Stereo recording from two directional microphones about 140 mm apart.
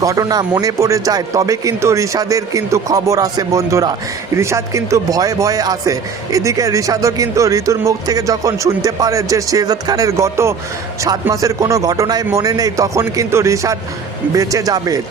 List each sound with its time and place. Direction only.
0.0 s speech: 25° right (ahead or behind)